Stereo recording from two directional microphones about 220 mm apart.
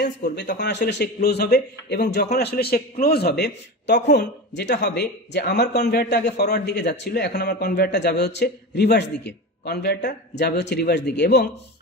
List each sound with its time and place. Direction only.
0.4 s a man's voice: 50° left (ahead or behind)